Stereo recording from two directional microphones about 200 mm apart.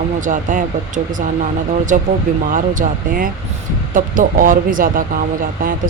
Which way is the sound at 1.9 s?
40° right (ahead or behind).